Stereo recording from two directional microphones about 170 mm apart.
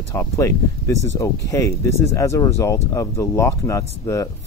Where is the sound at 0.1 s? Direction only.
15° left (ahead or behind).